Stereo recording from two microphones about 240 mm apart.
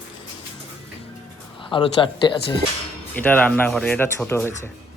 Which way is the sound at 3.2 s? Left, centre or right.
Centre.